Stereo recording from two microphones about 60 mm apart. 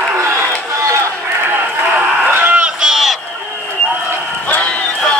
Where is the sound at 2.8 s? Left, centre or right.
Centre.